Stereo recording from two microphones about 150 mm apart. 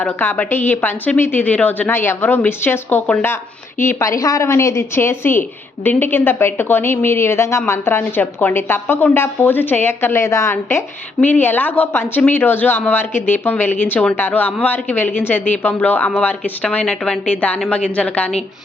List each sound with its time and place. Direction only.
0.0 s a woman's voice: 10° left (ahead or behind)